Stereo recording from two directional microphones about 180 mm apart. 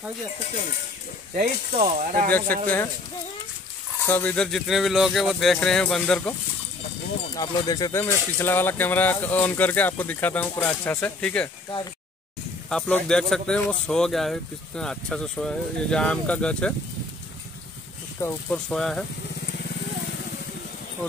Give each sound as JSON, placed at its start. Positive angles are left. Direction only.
{"t": 1.3, "sound": "speech", "side_deg": -50}
{"t": 2.2, "sound": "speech", "side_deg": 10}
{"t": 4.0, "sound": "speech", "side_deg": 10}
{"t": 7.3, "sound": "speech", "side_deg": 20}
{"t": 12.6, "sound": "speech", "side_deg": 5}
{"t": 18.5, "sound": "speech", "side_deg": 5}